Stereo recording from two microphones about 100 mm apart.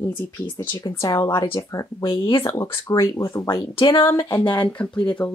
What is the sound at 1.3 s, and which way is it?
Speech, 60° left (ahead or behind).